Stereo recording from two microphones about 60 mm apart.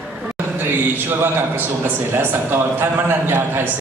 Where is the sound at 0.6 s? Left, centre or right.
Right.